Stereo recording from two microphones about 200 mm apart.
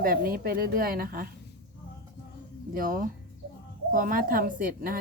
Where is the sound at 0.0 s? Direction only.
45° right (ahead or behind).